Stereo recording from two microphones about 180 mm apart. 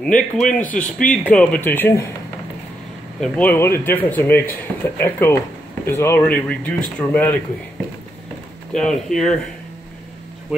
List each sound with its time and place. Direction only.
0.1 s speech: 45° left (ahead or behind)
0.7 s speech: 5° left (ahead or behind)
3.2 s speech: 5° left (ahead or behind)
8.7 s speech: 5° left (ahead or behind)